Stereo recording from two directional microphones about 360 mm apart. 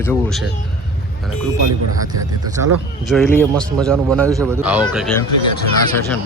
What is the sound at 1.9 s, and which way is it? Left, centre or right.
Speech, centre.